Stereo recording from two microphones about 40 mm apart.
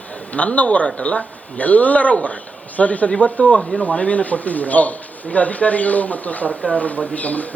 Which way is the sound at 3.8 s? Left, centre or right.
Left.